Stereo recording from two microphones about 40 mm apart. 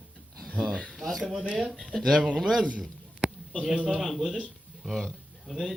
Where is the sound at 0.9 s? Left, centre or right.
Centre.